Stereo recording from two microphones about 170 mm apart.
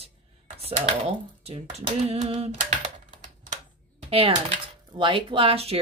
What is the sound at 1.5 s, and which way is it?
Speech, 40° right (ahead or behind).